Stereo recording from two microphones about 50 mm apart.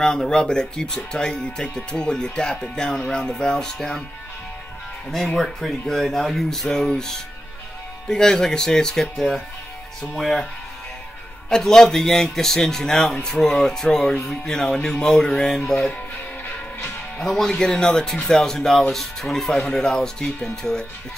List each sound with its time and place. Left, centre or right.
0.0 s speech: centre
5.4 s speech: centre
11.4 s speech: centre
17.2 s speech: centre